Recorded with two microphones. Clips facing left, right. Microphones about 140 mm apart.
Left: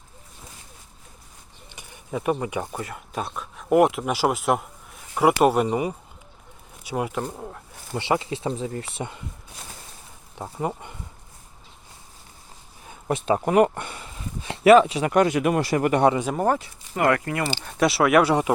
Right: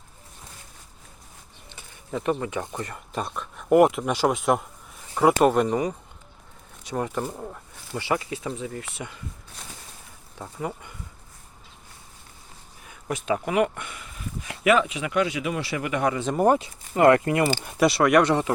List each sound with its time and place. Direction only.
1.7 s speech: 15° left (ahead or behind)
7.9 s speech: 25° left (ahead or behind)
10.3 s speech: 30° left (ahead or behind)
12.9 s speech: 30° left (ahead or behind)
16.4 s speech: 20° right (ahead or behind)
17.7 s speech: centre (ahead or behind)